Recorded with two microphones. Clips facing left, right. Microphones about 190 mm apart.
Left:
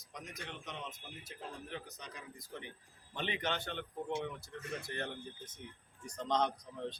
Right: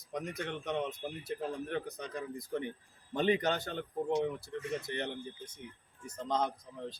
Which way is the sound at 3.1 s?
40° right (ahead or behind).